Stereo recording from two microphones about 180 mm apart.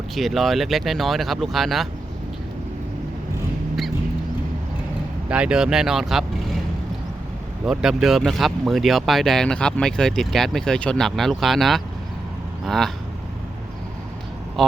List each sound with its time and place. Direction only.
0.2 s speech: centre (ahead or behind)
5.3 s speech: 5° right (ahead or behind)
7.6 s speech: centre (ahead or behind)